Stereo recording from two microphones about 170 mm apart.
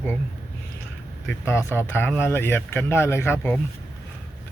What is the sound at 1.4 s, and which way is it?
Speech, 15° left (ahead or behind).